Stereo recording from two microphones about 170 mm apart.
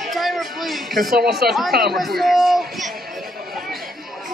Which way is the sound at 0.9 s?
60° right (ahead or behind).